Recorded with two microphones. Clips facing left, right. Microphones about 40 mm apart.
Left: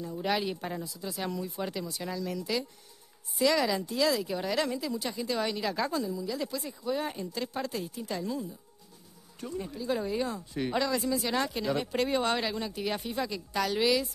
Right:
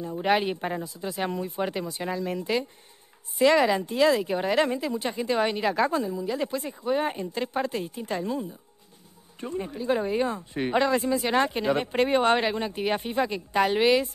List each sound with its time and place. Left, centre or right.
0.0 s speech: right